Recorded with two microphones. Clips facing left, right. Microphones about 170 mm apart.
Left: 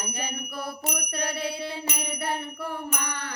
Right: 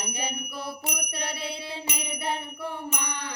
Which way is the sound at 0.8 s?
55° left (ahead or behind).